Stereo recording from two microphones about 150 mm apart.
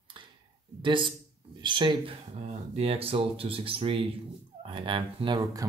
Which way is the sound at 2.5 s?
40° right (ahead or behind).